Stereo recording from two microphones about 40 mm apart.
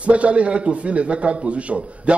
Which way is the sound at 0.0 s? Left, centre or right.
Right.